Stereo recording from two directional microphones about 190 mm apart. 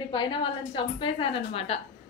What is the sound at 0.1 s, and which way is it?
A woman's voice, 25° left (ahead or behind).